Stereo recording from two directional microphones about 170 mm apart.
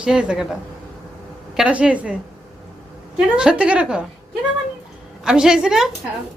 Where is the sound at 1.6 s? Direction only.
5° right (ahead or behind).